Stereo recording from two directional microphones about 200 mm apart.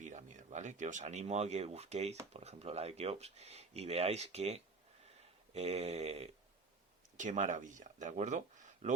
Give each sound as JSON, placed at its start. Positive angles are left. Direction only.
{"t": 0.0, "sound": "speech", "side_deg": -35}